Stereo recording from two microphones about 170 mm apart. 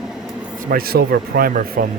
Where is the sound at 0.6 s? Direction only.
60° right (ahead or behind).